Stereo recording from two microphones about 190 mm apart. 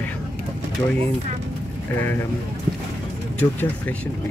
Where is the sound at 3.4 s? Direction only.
10° left (ahead or behind).